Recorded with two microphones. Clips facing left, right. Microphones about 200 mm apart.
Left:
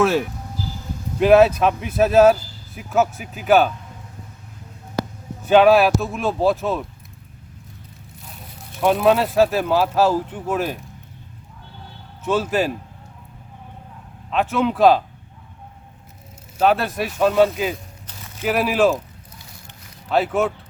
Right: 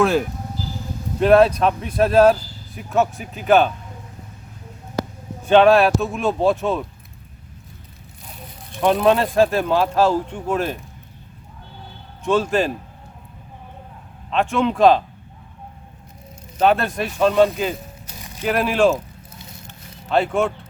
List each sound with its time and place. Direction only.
1.2 s a man's voice: 5° left (ahead or behind)
5.5 s a man's voice: 5° left (ahead or behind)
8.8 s speech: 5° left (ahead or behind)
12.2 s speech: 5° left (ahead or behind)
14.3 s a man's voice: 5° left (ahead or behind)
16.6 s a man's voice: 5° left (ahead or behind)
18.0 s a sound: 10° right (ahead or behind)
18.4 s speech: 5° left (ahead or behind)
20.1 s a man's voice: 5° left (ahead or behind)